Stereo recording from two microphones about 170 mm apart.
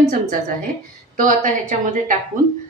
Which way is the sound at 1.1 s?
50° right (ahead or behind).